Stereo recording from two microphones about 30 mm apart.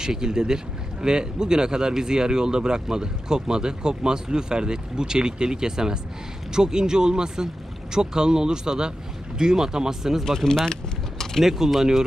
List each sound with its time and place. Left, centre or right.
0.0 s speech: right
10.2 s speech: centre
11.4 s speech: centre